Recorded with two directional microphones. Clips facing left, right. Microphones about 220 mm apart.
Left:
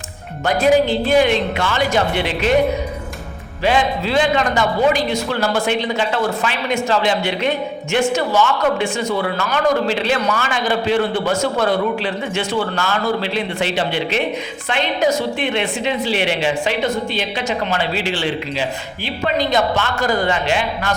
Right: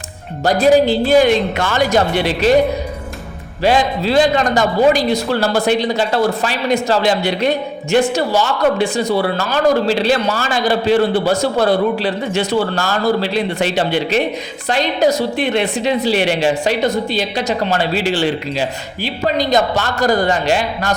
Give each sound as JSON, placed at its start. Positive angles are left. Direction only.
{"t": 0.4, "sound": "a man's voice", "side_deg": -35}
{"t": 3.6, "sound": "a man's voice", "side_deg": -40}